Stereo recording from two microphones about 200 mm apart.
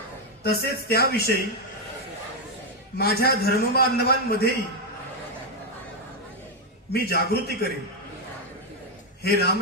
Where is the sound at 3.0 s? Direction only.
50° left (ahead or behind).